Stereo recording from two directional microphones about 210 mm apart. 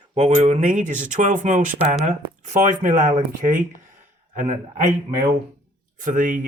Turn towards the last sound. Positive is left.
turn(degrees=-40)  # may be behind; listen again after turning